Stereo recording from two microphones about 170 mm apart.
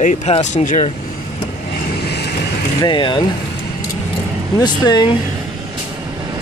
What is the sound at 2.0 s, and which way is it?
Vehicle, 75° left (ahead or behind).